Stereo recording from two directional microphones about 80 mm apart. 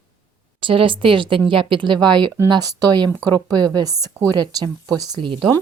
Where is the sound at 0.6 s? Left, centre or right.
Right.